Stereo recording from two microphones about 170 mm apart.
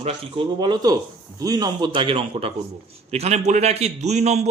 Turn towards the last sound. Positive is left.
turn(degrees=-40)  # may be behind; listen again after turning